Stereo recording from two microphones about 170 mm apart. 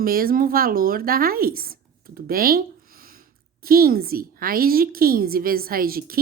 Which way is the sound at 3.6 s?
60° right (ahead or behind).